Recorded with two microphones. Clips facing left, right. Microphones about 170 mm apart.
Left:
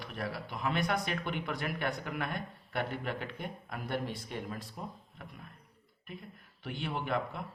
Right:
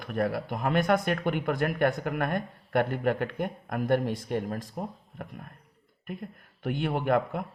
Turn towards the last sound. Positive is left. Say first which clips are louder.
# right 8 dB
turn(degrees=-50)  # may be behind; listen again after turning